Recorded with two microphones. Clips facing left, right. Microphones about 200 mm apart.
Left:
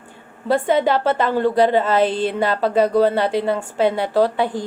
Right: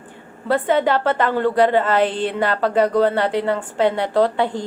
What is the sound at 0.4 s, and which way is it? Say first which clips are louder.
A woman's voice: left 1 dB; 10° left (ahead or behind).